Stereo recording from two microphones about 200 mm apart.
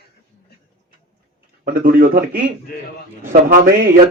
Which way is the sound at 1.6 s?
45° right (ahead or behind).